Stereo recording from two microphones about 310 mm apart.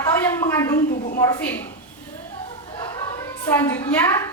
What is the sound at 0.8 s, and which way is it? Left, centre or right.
Speech, left.